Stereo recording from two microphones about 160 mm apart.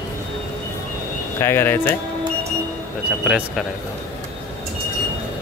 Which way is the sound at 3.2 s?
5° right (ahead or behind).